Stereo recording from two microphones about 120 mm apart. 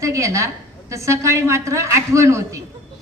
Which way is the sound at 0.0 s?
25° right (ahead or behind).